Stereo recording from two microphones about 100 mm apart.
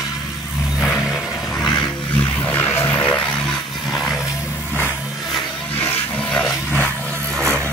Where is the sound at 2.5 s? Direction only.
20° left (ahead or behind).